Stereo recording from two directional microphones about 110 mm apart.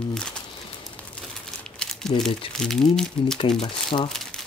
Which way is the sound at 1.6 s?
5° left (ahead or behind).